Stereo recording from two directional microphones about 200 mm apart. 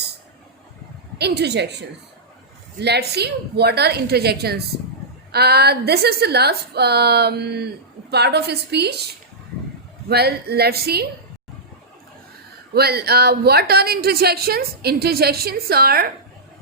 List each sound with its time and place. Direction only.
1.2 s a woman's voice: 55° right (ahead or behind)
2.8 s a woman's voice: 55° right (ahead or behind)
10.1 s a woman's voice: 50° right (ahead or behind)
12.7 s a woman's voice: 50° right (ahead or behind)